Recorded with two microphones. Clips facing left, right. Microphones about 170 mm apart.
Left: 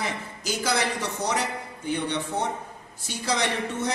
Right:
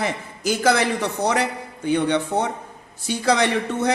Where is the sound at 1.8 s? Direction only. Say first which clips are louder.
Right 8 dB; 70° right (ahead or behind).